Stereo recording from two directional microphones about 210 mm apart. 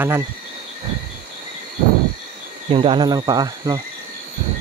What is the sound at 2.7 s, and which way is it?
Speech, 25° right (ahead or behind).